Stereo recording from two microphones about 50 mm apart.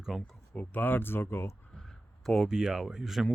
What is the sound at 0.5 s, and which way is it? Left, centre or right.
Speech, left.